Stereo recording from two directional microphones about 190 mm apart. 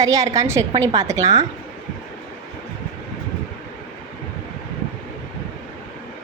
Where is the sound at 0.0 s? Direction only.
20° right (ahead or behind).